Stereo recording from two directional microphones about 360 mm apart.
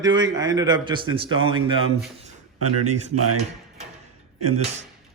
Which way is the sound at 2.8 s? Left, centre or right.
Centre.